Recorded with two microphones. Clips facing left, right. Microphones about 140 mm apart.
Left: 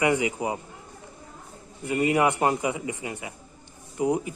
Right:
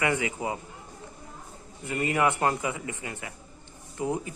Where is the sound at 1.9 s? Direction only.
15° left (ahead or behind).